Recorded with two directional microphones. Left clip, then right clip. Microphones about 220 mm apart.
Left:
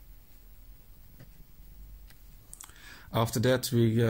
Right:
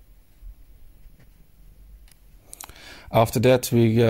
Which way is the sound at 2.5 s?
35° right (ahead or behind).